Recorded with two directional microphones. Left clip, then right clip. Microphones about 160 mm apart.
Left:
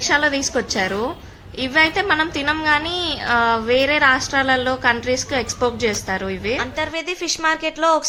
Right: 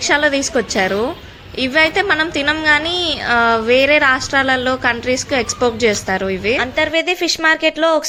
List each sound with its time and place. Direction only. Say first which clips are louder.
0.0 s a woman's voice: right 3 dB; 20° right (ahead or behind)